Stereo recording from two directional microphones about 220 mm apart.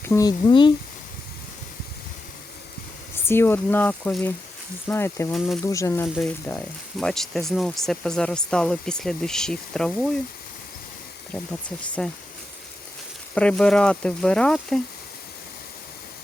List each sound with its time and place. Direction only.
0.0 s speech: 15° left (ahead or behind)
3.2 s speech: 10° left (ahead or behind)
12.0 s speech: 5° left (ahead or behind)
13.3 s speech: 5° left (ahead or behind)